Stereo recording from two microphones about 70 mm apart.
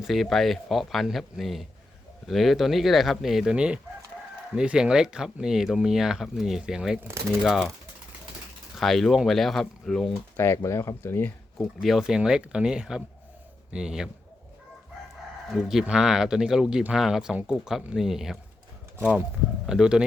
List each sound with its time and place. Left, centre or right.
0.0 s speech: centre
8.8 s speech: centre
10.3 s speech: left
11.5 s speech: centre
15.4 s speech: centre
19.6 s speech: centre